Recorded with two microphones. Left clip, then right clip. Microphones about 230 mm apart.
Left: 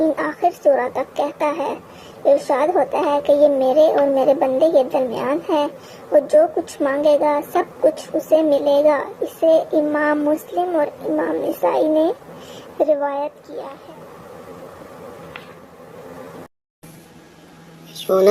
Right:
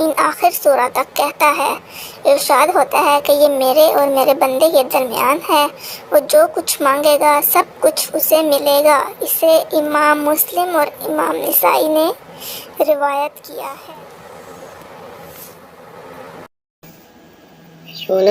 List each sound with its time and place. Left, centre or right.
0.0 s a child's voice: right
18.0 s speech: centre